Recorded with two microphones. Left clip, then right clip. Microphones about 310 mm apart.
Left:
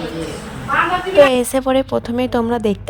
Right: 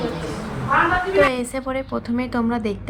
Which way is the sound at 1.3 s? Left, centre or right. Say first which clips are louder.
Left 9 dB; left.